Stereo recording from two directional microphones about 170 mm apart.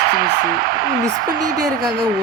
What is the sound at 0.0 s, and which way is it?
Speech, 75° right (ahead or behind).